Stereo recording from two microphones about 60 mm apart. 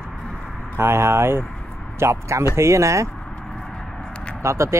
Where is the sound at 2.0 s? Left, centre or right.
Right.